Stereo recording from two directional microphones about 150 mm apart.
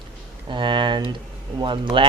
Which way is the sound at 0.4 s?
30° right (ahead or behind).